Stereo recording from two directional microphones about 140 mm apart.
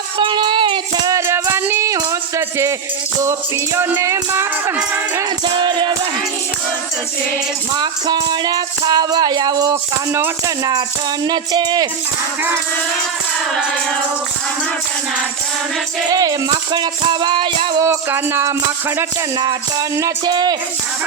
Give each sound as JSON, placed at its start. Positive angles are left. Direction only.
{"t": 0.2, "sound": "music", "side_deg": -35}
{"t": 3.8, "sound": "speech", "side_deg": -20}
{"t": 5.5, "sound": "music", "side_deg": -35}
{"t": 7.8, "sound": "speech", "side_deg": -30}
{"t": 11.3, "sound": "music", "side_deg": -30}
{"t": 16.0, "sound": "speech", "side_deg": -30}
{"t": 16.7, "sound": "music", "side_deg": -30}
{"t": 17.8, "sound": "speech", "side_deg": -20}
{"t": 20.0, "sound": "speech", "side_deg": -25}